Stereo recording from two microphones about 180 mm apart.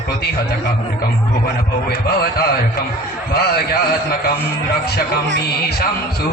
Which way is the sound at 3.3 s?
60° left (ahead or behind).